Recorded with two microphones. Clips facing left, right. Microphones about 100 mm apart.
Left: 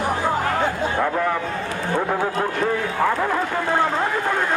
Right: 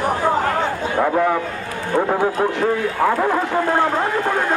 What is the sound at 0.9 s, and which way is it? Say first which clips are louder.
A man's voice: right 7 dB; 15° right (ahead or behind).